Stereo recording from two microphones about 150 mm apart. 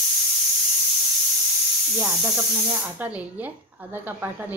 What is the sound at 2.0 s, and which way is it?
A woman's voice, 15° right (ahead or behind).